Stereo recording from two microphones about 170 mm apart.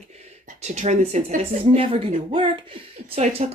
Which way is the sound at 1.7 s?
35° right (ahead or behind).